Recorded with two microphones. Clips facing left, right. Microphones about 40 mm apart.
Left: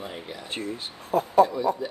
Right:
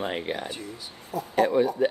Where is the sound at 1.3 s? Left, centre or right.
Right.